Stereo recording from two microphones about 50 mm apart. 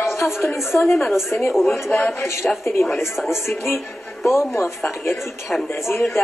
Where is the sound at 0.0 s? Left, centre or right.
Left.